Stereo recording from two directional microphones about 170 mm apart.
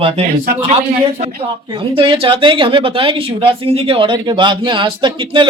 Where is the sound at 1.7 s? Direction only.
30° right (ahead or behind).